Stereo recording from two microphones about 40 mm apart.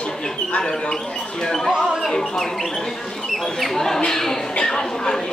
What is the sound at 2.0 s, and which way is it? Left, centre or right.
Speech, centre.